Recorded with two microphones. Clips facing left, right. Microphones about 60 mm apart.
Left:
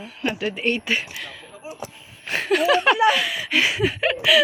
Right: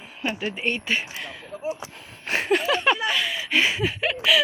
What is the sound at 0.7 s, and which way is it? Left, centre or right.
Speech, centre.